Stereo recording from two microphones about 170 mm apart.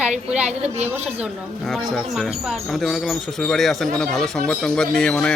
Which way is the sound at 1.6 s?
Centre (ahead or behind).